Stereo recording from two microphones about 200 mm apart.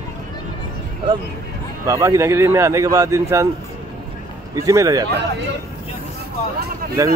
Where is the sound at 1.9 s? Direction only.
15° right (ahead or behind).